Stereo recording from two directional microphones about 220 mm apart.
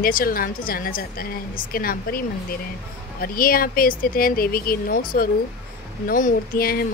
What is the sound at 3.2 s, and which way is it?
Speech, 40° left (ahead or behind).